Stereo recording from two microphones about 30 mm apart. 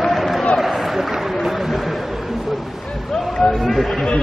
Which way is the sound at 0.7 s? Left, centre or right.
Centre.